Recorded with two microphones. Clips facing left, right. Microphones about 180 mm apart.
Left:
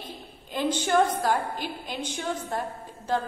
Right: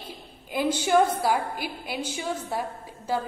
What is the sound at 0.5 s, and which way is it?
A woman's voice, 10° right (ahead or behind).